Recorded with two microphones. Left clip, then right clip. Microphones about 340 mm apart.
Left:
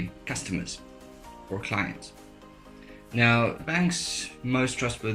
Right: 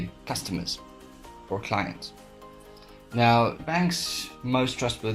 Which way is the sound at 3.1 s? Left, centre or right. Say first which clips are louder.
Right 2 dB; centre.